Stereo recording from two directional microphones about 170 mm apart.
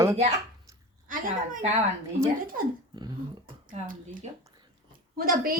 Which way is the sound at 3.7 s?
55° right (ahead or behind).